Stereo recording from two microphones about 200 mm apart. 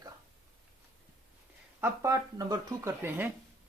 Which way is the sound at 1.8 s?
15° right (ahead or behind).